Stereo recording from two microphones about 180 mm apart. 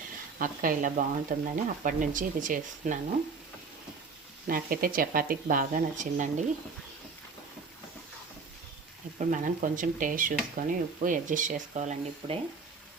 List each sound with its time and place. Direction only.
0.3 s speech: 50° right (ahead or behind)
4.4 s speech: 50° right (ahead or behind)
9.1 s speech: 45° right (ahead or behind)